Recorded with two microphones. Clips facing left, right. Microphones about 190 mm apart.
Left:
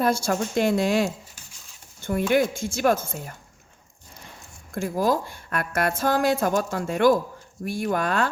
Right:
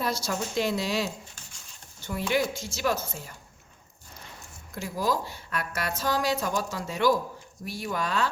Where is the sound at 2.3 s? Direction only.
50° left (ahead or behind).